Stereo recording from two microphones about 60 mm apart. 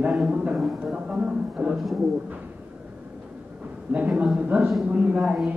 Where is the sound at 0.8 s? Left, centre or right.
Centre.